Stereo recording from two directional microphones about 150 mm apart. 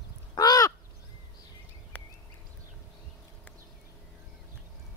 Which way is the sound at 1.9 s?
10° left (ahead or behind).